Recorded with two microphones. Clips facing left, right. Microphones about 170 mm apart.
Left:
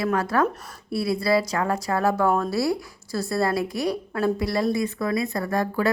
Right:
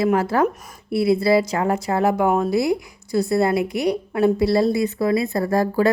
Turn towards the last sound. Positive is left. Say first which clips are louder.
# right 5 dB
turn(degrees=-35)  # may be behind; listen again after turning